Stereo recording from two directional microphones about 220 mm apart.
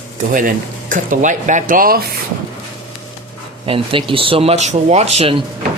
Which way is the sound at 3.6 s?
25° right (ahead or behind).